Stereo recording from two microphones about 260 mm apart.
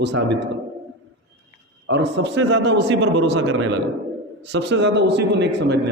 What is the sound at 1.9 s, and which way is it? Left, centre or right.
A man's voice, right.